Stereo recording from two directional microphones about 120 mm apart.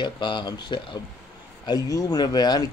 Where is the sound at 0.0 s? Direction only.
40° left (ahead or behind).